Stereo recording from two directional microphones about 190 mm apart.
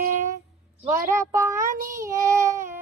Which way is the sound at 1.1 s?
15° right (ahead or behind).